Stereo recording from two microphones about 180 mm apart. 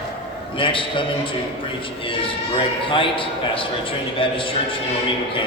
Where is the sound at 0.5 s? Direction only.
30° left (ahead or behind).